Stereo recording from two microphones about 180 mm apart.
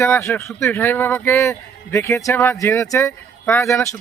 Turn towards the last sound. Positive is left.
turn(degrees=15)  # may be behind; listen again after turning